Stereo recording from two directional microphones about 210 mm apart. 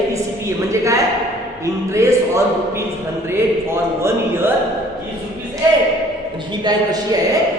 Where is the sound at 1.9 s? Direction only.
15° right (ahead or behind).